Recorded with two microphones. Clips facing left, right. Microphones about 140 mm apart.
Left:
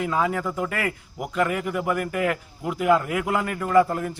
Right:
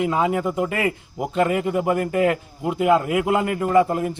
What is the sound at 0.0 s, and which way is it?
A man's voice, 20° right (ahead or behind).